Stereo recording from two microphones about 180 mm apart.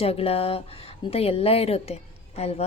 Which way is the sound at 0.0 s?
35° left (ahead or behind).